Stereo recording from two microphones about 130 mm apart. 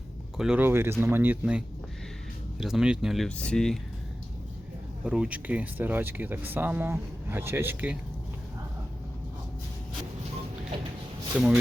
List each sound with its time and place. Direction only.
0.3 s speech: 5° right (ahead or behind)
0.6 s speech: 20° right (ahead or behind); by 3.2 s 5° right (ahead or behind)
3.2 s speech: 10° left (ahead or behind)
5.0 s speech: 5° right (ahead or behind)
11.3 s speech: 10° right (ahead or behind)